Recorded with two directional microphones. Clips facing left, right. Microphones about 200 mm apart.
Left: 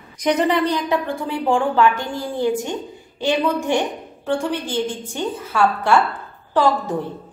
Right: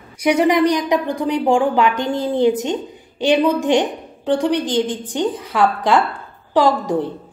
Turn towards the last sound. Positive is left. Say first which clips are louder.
# right 3 dB
turn(degrees=-15)  # may be behind; listen again after turning